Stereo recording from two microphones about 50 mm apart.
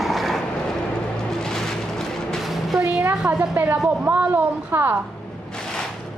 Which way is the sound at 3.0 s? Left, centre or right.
Right.